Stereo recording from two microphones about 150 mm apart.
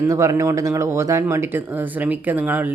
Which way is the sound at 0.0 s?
20° right (ahead or behind).